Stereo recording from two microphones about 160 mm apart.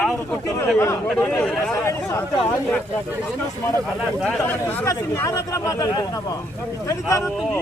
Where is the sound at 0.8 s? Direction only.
15° left (ahead or behind).